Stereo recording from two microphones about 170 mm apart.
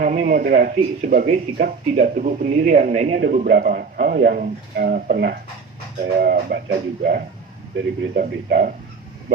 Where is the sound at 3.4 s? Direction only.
65° right (ahead or behind).